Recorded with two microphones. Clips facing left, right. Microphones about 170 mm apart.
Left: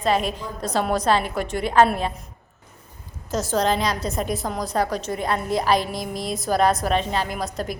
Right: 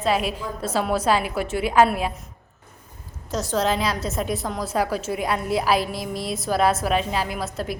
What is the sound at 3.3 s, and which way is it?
A woman's voice, centre (ahead or behind).